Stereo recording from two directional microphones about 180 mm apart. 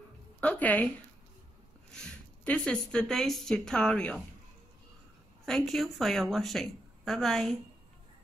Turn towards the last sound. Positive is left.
turn(degrees=0)  # may be behind; listen again after turning